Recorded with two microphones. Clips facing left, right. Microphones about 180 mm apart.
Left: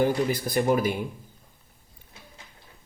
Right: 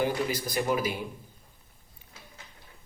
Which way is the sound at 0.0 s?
50° left (ahead or behind).